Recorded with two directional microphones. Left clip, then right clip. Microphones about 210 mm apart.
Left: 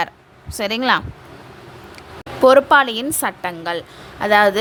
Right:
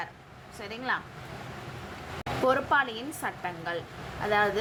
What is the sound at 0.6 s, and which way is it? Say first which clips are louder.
Speech: left 15 dB; 55° left (ahead or behind).